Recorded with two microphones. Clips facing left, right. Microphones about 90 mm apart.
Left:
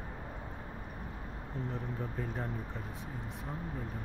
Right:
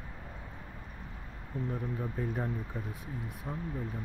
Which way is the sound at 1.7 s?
5° right (ahead or behind).